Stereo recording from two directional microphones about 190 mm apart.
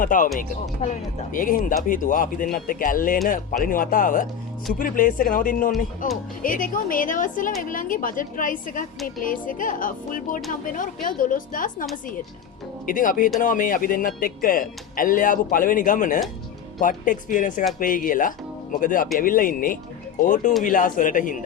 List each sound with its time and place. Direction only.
0.0 s speech: 45° left (ahead or behind)